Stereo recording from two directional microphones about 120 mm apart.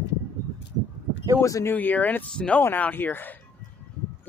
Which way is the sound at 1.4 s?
25° left (ahead or behind).